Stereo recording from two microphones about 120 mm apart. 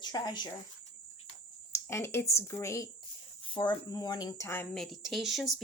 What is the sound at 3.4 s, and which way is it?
Speech, 40° left (ahead or behind).